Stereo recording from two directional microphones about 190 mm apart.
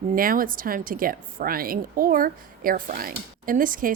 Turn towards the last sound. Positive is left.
turn(degrees=-45)  # may be behind; listen again after turning